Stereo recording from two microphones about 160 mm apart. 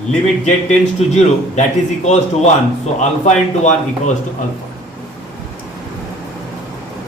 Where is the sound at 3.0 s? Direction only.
45° left (ahead or behind).